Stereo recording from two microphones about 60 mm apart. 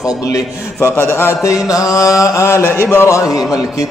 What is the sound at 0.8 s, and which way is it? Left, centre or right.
Speech, left.